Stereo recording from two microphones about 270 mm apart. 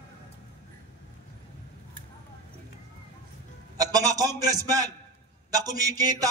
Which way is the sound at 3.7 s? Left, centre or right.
Centre.